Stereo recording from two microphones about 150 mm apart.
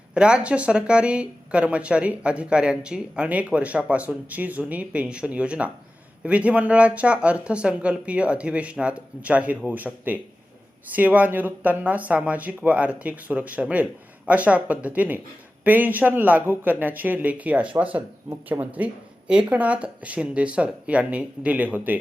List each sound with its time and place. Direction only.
0.1 s speech: 5° right (ahead or behind)